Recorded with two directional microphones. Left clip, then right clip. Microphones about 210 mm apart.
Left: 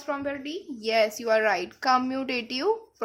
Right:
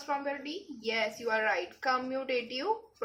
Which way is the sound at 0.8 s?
45° left (ahead or behind).